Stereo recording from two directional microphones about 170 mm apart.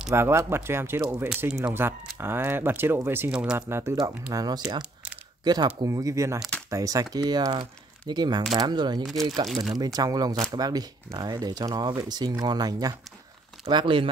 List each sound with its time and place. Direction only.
0.1 s speech: 15° right (ahead or behind)
3.6 s speech: 15° right (ahead or behind)
9.0 s speech: centre (ahead or behind)
9.9 s speech: 20° right (ahead or behind)